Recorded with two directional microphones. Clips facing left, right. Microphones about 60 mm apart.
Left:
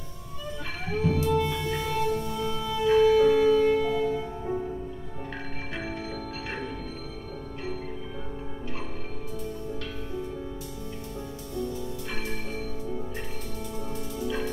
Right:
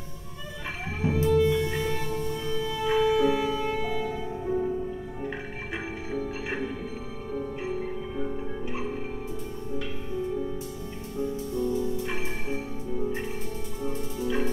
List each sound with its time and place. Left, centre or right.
1.0 s music: centre
12.1 s music: centre
13.8 s music: centre